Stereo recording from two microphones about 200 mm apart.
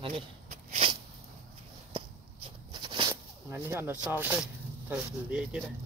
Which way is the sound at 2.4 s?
25° right (ahead or behind).